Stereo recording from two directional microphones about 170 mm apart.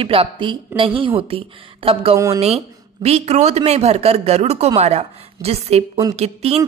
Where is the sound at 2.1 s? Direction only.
15° right (ahead or behind).